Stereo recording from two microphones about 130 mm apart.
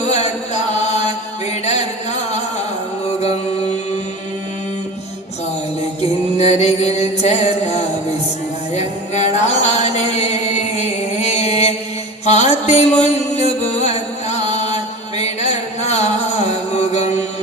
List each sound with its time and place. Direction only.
0.0 s chant: 60° left (ahead or behind)
1.6 s a sound: 60° left (ahead or behind)
3.2 s music: 55° left (ahead or behind)
6.0 s chant: 55° left (ahead or behind)
8.7 s music: 60° left (ahead or behind)